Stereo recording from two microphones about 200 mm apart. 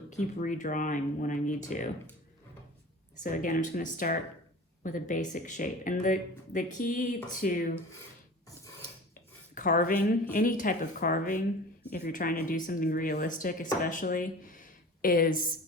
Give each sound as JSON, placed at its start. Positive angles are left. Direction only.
{"t": 0.1, "sound": "speech", "side_deg": 40}
{"t": 3.2, "sound": "speech", "side_deg": 40}
{"t": 9.6, "sound": "a woman's voice", "side_deg": 40}